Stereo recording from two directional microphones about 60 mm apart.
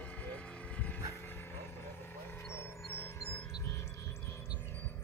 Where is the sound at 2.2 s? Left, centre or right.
Left.